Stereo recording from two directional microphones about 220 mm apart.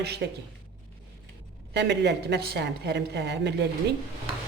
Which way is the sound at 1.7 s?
50° right (ahead or behind).